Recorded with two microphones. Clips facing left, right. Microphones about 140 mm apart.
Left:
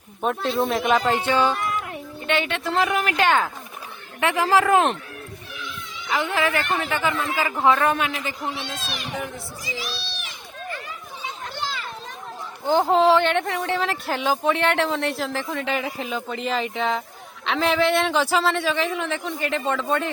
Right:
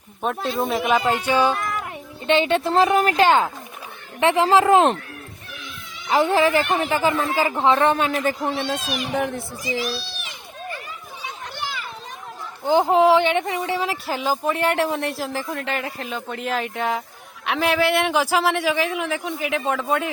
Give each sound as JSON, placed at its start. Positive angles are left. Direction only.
{"t": 0.2, "sound": "speech", "side_deg": 0}
{"t": 2.2, "sound": "speech", "side_deg": -30}
{"t": 6.1, "sound": "speech", "side_deg": -35}
{"t": 8.1, "sound": "speech", "side_deg": -45}
{"t": 9.0, "sound": "a child's voice", "side_deg": -60}
{"t": 9.6, "sound": "a sound", "side_deg": -15}
{"t": 12.6, "sound": "speech", "side_deg": -15}